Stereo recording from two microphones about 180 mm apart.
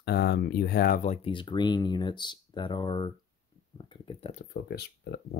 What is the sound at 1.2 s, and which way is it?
Speech, 25° left (ahead or behind).